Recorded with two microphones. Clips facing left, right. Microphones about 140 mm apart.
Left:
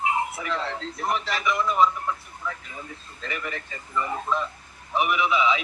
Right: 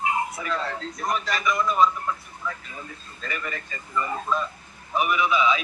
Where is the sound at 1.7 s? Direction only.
20° left (ahead or behind).